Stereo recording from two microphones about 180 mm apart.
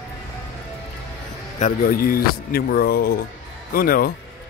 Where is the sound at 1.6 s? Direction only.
50° left (ahead or behind).